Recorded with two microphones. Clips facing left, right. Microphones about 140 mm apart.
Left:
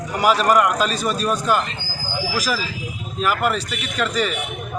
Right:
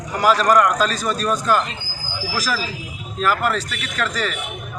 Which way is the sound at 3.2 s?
5° left (ahead or behind).